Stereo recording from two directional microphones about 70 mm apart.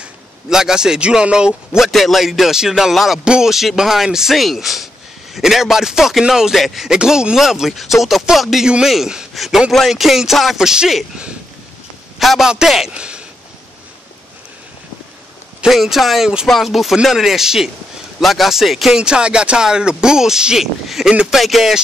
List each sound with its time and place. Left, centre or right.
0.0 s a man's voice: centre
1.9 s speech: centre
12.2 s speech: centre
15.6 s speech: centre
21.1 s speech: centre
21.4 s speech: centre